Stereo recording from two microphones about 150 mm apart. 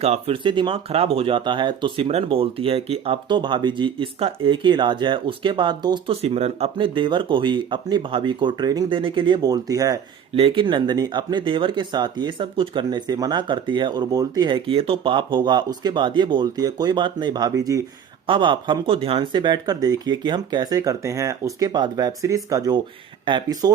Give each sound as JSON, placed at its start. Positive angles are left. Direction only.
{"t": 0.0, "sound": "speech", "side_deg": -40}
{"t": 6.2, "sound": "speech", "side_deg": -45}
{"t": 10.3, "sound": "speech", "side_deg": -35}